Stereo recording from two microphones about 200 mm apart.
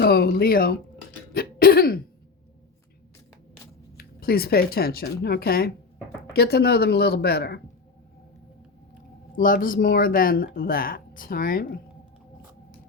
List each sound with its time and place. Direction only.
0.0 s speech: 50° left (ahead or behind)
1.3 s throat clearing: 50° left (ahead or behind)
3.9 s speech: 50° left (ahead or behind)
9.3 s speech: 45° left (ahead or behind)